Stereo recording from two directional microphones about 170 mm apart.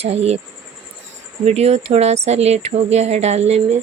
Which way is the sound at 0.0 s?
40° right (ahead or behind).